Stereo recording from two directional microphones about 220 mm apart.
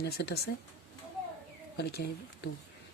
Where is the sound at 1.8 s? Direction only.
50° left (ahead or behind).